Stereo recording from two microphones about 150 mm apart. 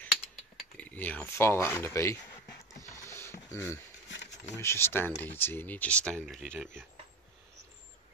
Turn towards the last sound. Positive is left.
turn(degrees=0)  # may be behind; listen again after turning